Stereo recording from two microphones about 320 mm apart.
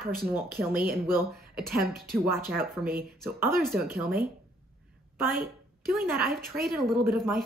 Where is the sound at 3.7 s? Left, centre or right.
Right.